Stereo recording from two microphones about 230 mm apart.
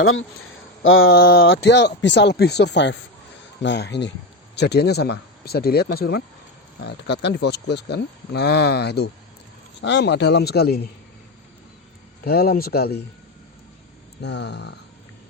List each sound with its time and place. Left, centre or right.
0.0 s speech: left
1.0 s speech: left
12.2 s speech: left
14.2 s speech: left